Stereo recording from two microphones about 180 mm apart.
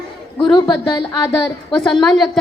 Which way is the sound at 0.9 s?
25° left (ahead or behind).